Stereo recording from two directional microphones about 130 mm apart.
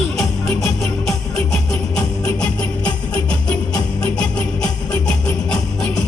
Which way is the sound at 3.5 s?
10° left (ahead or behind).